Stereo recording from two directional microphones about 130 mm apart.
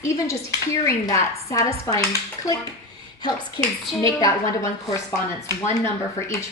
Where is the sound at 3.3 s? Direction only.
5° left (ahead or behind).